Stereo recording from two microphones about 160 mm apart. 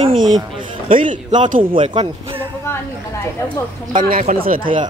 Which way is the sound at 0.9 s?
55° right (ahead or behind).